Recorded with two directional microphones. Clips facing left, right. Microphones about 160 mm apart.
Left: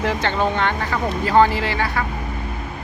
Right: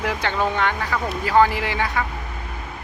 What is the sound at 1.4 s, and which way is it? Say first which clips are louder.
Speech: left 1 dB; 15° right (ahead or behind).